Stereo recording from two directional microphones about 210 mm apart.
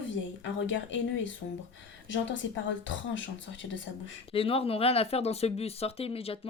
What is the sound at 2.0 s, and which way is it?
Speech, 60° left (ahead or behind).